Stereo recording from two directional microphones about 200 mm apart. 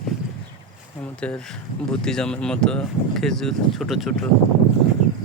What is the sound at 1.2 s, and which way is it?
Speech, 5° left (ahead or behind).